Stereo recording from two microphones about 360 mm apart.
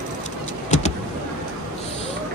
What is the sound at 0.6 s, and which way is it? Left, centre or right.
Vehicle, centre.